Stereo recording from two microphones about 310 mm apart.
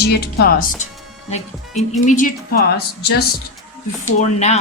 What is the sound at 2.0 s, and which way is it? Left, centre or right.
Speech, left.